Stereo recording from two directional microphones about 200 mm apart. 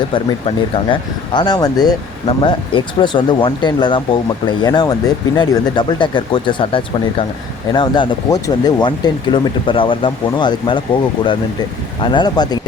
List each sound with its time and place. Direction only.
0.1 s speech: 25° left (ahead or behind)